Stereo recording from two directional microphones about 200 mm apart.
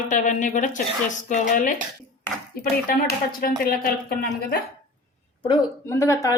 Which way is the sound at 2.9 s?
45° left (ahead or behind).